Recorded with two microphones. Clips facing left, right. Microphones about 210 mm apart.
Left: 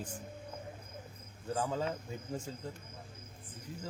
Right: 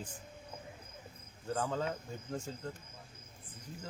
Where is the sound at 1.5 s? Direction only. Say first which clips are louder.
Left 1 dB; 10° left (ahead or behind).